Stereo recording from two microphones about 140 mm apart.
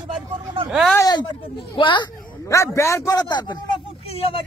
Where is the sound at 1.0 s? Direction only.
25° left (ahead or behind).